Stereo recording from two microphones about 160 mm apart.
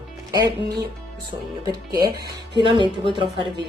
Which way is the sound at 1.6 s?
25° right (ahead or behind).